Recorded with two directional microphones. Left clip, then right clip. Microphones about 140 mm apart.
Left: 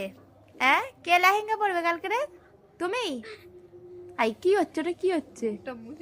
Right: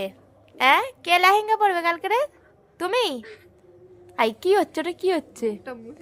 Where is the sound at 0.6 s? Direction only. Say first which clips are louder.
Right 5 dB; 30° right (ahead or behind).